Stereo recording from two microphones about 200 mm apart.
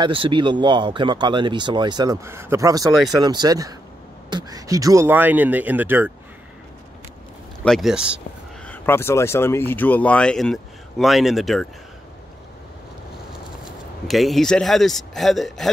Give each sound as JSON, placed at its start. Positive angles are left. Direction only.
{"t": 0.0, "sound": "speech", "side_deg": -25}
{"t": 7.6, "sound": "speech", "side_deg": 0}
{"t": 8.6, "sound": "speech", "side_deg": 10}
{"t": 13.3, "sound": "speech", "side_deg": 0}